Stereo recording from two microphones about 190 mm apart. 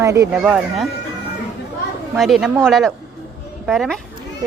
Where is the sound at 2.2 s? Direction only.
Centre (ahead or behind).